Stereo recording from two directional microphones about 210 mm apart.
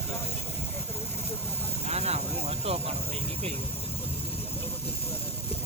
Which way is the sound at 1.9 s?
30° right (ahead or behind).